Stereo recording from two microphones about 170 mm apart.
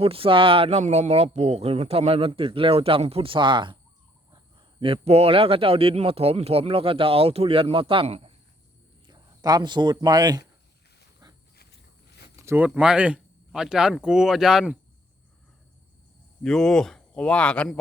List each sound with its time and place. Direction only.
0.0 s a man's voice: 35° right (ahead or behind)
9.0 s speech: 25° right (ahead or behind)
12.4 s speech: 10° right (ahead or behind)
16.4 s speech: 5° left (ahead or behind)